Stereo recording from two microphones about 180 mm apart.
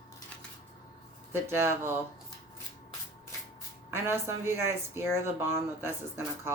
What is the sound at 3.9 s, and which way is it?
Speech, 15° right (ahead or behind).